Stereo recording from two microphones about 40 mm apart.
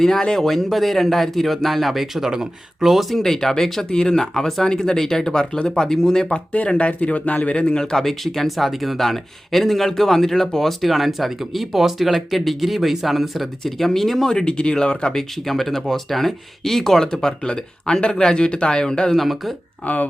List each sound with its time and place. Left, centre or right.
0.0 s speech: centre
2.1 s speech: centre
6.3 s speech: left
7.6 s speech: centre
15.1 s speech: centre
19.1 s speech: centre
19.8 s speech: left